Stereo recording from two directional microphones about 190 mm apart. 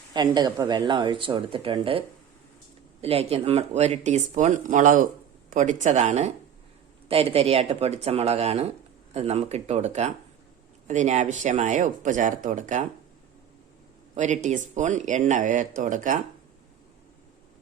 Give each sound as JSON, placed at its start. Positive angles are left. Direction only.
{"t": 0.1, "sound": "speech", "side_deg": -20}
{"t": 14.2, "sound": "speech", "side_deg": -40}